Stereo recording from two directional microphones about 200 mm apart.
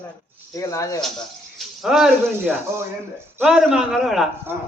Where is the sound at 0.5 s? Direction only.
15° left (ahead or behind).